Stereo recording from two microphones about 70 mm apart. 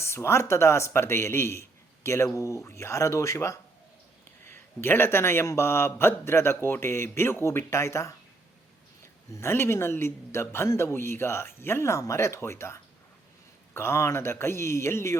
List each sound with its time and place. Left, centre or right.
0.0 s a man's voice: left
4.4 s a man's voice: left
9.3 s a man's voice: left